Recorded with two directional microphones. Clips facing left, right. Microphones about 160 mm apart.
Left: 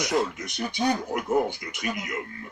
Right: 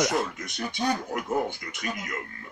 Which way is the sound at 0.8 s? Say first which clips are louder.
Left 2 dB; 20° left (ahead or behind).